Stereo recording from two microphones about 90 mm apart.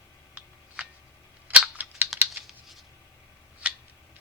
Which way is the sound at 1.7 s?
20° right (ahead or behind).